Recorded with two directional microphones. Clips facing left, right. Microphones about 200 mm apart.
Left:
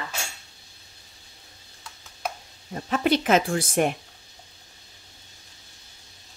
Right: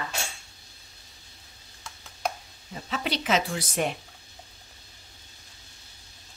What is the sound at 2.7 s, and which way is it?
Speech, 50° left (ahead or behind).